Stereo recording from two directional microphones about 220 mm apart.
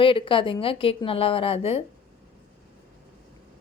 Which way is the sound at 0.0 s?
25° left (ahead or behind).